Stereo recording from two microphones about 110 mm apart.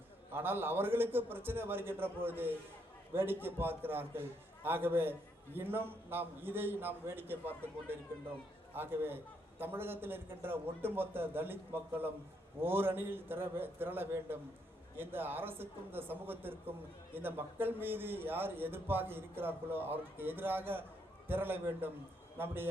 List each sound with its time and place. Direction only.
0.3 s speech: 20° right (ahead or behind)